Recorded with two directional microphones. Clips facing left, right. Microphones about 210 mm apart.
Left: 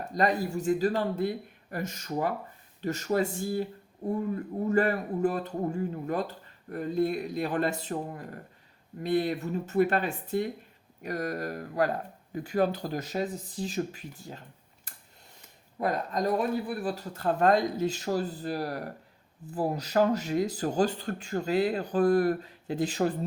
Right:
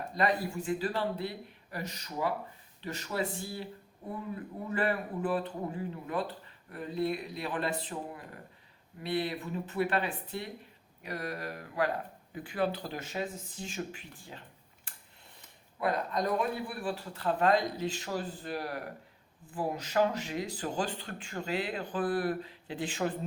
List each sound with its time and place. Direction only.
0.1 s speech: 40° left (ahead or behind)
14.9 s tick-tock: 40° left (ahead or behind)
15.8 s speech: 40° left (ahead or behind)